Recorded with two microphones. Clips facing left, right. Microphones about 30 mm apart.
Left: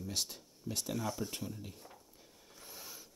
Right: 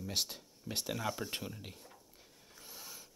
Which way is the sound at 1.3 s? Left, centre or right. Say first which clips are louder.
Right 1 dB; right.